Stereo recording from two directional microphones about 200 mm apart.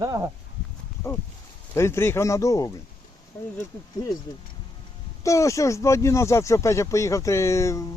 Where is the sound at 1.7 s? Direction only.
15° left (ahead or behind).